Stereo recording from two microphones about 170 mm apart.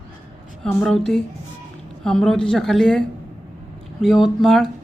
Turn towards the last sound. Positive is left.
turn(degrees=0)  # may be behind; listen again after turning